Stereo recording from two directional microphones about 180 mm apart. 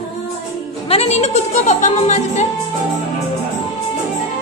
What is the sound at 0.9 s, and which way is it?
Music, 35° left (ahead or behind).